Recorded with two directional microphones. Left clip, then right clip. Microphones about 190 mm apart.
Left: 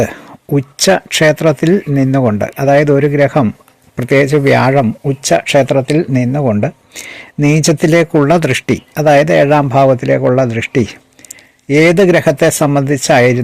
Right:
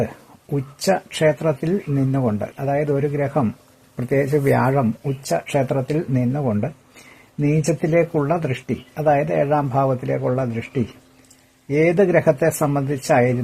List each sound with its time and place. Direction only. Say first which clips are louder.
0.0 s speech: left 10 dB; 35° left (ahead or behind)